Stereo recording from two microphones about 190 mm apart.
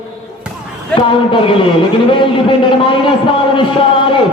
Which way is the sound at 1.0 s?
25° left (ahead or behind).